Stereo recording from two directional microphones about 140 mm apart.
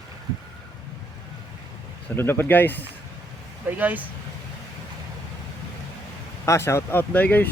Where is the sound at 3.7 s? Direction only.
10° right (ahead or behind).